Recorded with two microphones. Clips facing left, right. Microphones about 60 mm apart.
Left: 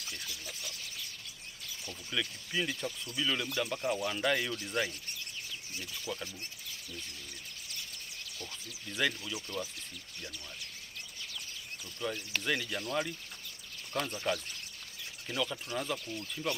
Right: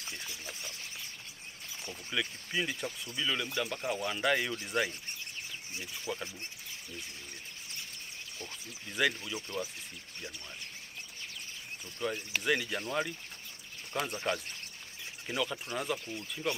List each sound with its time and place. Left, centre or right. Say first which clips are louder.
0.0 s a sound: right 1 dB; right
2.1 s speech: right 1 dB; centre
3.4 s speech: left 1 dB; right
9.2 s speech: right 1 dB; right
12.0 s speech: right 2 dB; centre
14.1 s speech: even; right